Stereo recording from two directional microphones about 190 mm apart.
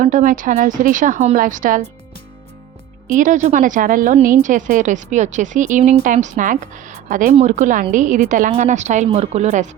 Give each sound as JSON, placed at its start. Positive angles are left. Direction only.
{"t": 0.0, "sound": "a woman's voice", "side_deg": -40}
{"t": 3.1, "sound": "a woman's voice", "side_deg": -40}